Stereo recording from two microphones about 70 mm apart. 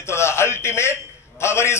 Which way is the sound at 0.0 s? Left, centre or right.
Left.